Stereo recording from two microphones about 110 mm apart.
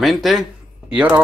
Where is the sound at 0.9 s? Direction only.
15° right (ahead or behind).